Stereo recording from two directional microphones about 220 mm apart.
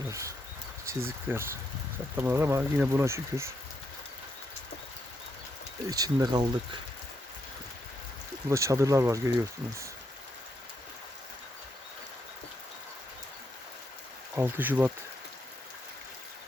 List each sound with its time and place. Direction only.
0.1 s speech: 15° right (ahead or behind)
5.9 s speech: 15° right (ahead or behind)
8.4 s speech: 15° right (ahead or behind)
14.3 s speech: 10° right (ahead or behind)